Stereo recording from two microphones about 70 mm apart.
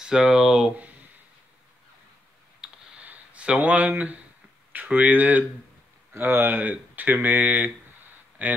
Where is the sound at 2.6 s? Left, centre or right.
Centre.